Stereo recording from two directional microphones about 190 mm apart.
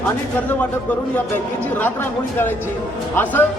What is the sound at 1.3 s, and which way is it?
A man's voice, 10° left (ahead or behind).